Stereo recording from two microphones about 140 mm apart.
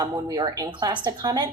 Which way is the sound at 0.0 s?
25° right (ahead or behind).